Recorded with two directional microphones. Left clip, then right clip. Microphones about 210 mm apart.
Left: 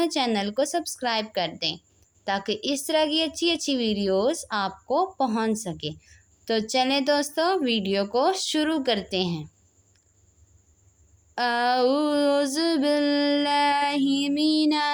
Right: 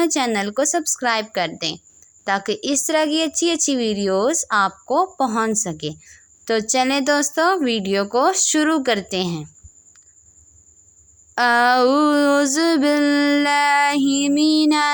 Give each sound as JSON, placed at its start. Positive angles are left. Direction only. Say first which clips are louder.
{"t": 0.0, "sound": "a woman's voice", "louder": "right 5 dB", "side_deg": -45}
{"t": 11.3, "sound": "a woman's voice", "louder": "right 8 dB", "side_deg": -45}